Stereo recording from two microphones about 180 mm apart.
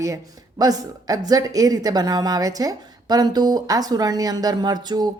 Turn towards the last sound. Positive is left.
turn(degrees=-25)  # may be behind; listen again after turning